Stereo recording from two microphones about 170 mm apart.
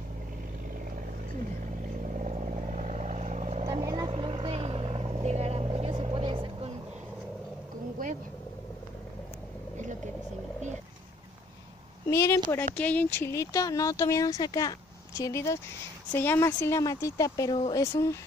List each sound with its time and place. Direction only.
2.1 s vehicle: 45° right (ahead or behind)
3.6 s vehicle: 20° right (ahead or behind)
8.0 s vehicle: 55° right (ahead or behind)
12.1 s a sound: 15° left (ahead or behind)
12.4 s speech: 10° left (ahead or behind); by 17.8 s 25° left (ahead or behind)
17.9 s speech: 15° left (ahead or behind)